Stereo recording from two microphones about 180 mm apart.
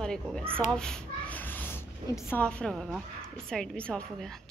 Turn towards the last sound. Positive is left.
turn(degrees=5)  # may be behind; listen again after turning